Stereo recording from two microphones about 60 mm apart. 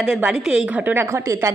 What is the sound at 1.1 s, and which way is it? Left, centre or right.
Speech, right.